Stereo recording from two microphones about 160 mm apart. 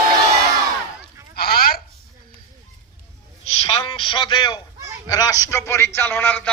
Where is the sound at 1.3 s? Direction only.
75° left (ahead or behind).